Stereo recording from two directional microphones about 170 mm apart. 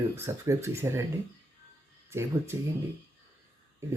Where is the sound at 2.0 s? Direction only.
15° right (ahead or behind).